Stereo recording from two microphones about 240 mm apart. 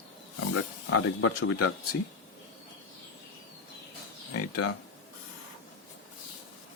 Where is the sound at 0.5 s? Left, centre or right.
Left.